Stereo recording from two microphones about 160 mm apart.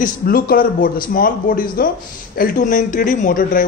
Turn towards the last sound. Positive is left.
turn(degrees=55)  # may be behind; listen again after turning